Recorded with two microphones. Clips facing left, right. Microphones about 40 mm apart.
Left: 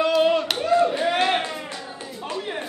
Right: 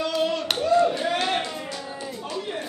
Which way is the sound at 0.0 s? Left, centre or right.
Left.